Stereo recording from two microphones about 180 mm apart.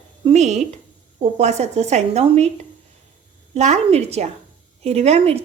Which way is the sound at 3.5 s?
40° right (ahead or behind).